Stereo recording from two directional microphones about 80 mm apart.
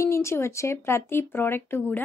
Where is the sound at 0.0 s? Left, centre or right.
Left.